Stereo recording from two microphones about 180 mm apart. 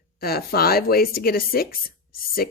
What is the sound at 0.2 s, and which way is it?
Speech, 60° left (ahead or behind).